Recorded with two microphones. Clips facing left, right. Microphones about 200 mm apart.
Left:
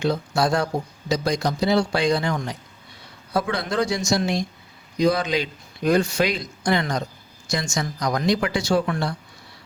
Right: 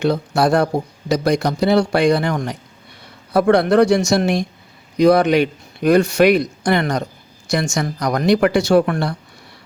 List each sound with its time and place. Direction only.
0.0 s speech: 60° right (ahead or behind)